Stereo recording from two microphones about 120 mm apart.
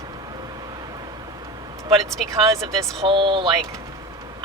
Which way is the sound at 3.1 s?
45° right (ahead or behind).